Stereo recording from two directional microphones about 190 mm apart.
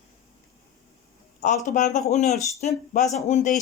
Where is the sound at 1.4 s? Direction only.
40° left (ahead or behind).